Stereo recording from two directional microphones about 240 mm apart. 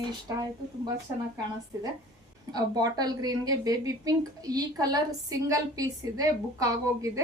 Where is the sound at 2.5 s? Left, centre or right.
Centre.